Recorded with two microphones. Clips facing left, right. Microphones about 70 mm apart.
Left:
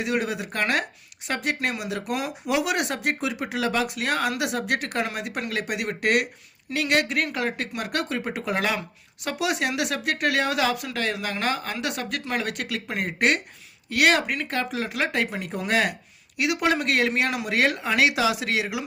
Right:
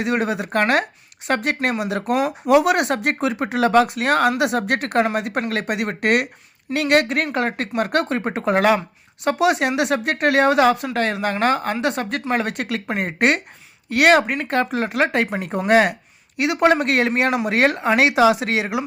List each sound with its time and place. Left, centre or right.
0.0 s speech: right